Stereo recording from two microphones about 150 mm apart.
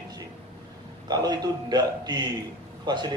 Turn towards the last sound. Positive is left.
turn(degrees=-30)  # may be behind; listen again after turning